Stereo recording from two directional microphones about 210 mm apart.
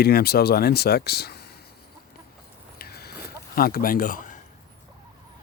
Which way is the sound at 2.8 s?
50° left (ahead or behind).